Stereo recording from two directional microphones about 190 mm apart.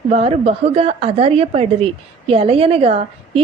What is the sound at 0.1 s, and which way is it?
A woman's voice, 30° right (ahead or behind).